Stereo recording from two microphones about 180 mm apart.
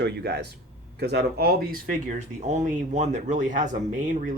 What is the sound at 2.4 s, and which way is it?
Speech, 40° right (ahead or behind).